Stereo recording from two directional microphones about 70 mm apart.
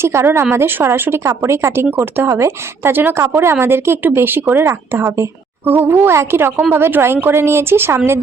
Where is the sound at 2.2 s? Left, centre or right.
Right.